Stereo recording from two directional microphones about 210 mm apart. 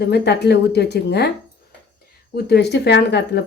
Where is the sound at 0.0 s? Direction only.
50° left (ahead or behind).